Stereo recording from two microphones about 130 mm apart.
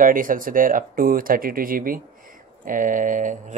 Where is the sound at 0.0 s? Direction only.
90° right.